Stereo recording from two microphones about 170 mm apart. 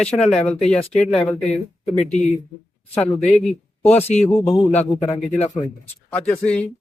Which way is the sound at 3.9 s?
40° left (ahead or behind).